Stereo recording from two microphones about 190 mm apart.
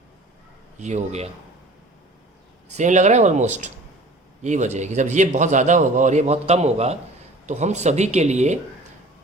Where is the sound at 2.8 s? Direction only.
40° right (ahead or behind).